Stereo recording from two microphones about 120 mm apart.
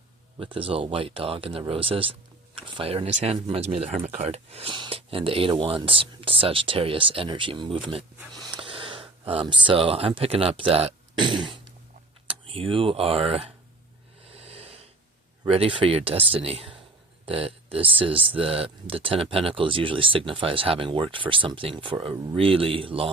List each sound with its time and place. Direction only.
0.3 s speech: 50° right (ahead or behind)
4.7 s speech: 40° right (ahead or behind)
4.9 s speech: 50° right (ahead or behind)
11.1 s a sound: 40° right (ahead or behind)
12.3 s speech: 50° right (ahead or behind)
14.3 s a sound: 55° right (ahead or behind)
15.4 s speech: 50° right (ahead or behind)